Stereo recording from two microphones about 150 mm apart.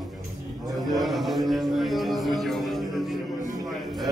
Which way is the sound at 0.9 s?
Centre (ahead or behind).